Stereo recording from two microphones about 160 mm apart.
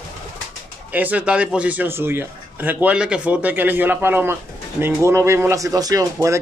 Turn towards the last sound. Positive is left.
turn(degrees=-20)  # may be behind; listen again after turning